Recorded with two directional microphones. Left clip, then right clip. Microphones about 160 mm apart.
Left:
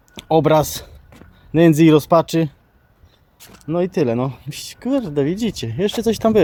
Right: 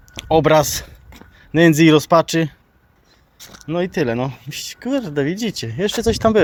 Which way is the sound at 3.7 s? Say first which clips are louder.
Left 1 dB; 25° left (ahead or behind).